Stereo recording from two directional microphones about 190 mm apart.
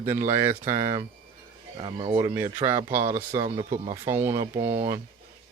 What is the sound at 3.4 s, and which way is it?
Speech, 25° right (ahead or behind).